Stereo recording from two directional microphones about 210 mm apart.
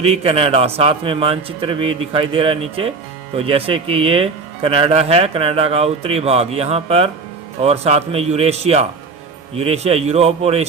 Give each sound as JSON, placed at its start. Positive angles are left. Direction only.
{"t": 0.0, "sound": "speech", "side_deg": -30}